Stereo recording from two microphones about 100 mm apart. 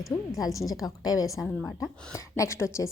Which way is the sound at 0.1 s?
35° left (ahead or behind).